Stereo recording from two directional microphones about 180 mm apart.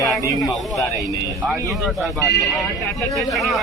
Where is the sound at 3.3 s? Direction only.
Centre (ahead or behind).